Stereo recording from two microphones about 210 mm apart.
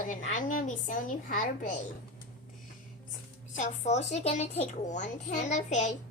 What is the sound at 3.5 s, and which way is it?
A woman's voice, 35° left (ahead or behind).